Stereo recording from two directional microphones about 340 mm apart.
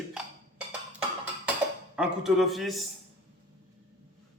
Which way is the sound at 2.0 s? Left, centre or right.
Centre.